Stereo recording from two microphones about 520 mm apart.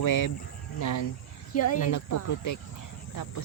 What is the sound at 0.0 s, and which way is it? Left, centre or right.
Speech, left.